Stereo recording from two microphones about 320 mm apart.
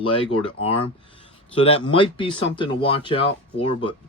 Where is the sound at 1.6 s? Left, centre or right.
Centre.